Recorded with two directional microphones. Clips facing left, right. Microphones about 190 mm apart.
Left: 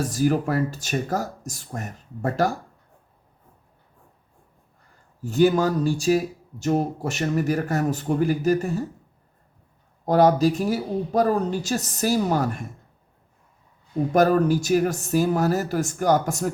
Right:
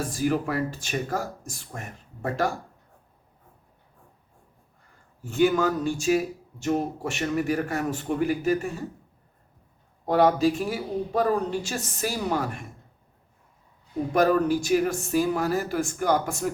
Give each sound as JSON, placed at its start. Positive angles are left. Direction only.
{"t": 0.0, "sound": "speech", "side_deg": 40}
{"t": 5.2, "sound": "speech", "side_deg": 40}
{"t": 10.1, "sound": "speech", "side_deg": 40}
{"t": 14.1, "sound": "speech", "side_deg": 40}